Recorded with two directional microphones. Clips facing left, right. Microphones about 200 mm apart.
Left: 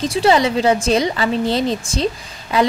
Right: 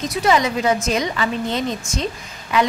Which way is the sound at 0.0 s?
30° left (ahead or behind).